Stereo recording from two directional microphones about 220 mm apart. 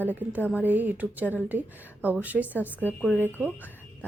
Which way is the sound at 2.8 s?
5° left (ahead or behind).